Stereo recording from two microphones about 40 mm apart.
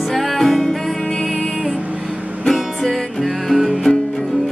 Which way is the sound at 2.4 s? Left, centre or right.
Centre.